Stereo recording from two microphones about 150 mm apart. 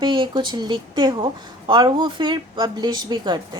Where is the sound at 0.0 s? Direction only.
30° right (ahead or behind).